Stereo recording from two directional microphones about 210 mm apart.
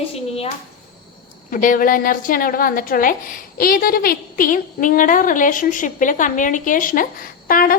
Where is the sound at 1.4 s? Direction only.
40° left (ahead or behind).